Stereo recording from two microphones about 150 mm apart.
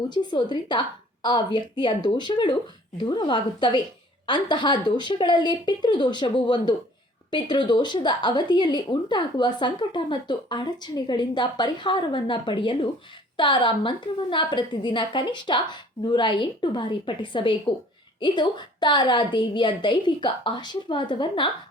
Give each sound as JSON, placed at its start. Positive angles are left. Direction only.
{"t": 0.1, "sound": "speech", "side_deg": 30}